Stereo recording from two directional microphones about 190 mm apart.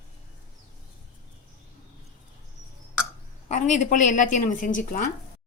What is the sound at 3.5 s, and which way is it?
A woman's voice, 40° left (ahead or behind).